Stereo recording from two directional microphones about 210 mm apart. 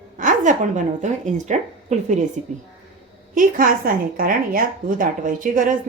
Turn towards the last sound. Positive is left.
turn(degrees=-40)  # may be behind; listen again after turning